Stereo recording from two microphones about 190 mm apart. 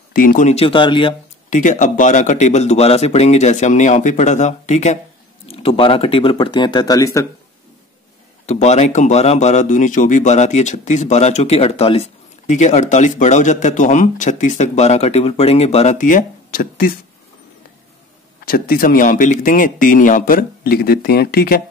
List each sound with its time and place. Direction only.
0.1 s a man's voice: 45° left (ahead or behind); by 1.1 s 25° left (ahead or behind)
1.5 s a man's voice: 40° left (ahead or behind); by 7.2 s 15° left (ahead or behind)
8.5 s a man's voice: 35° left (ahead or behind)
18.5 s speech: 50° left (ahead or behind)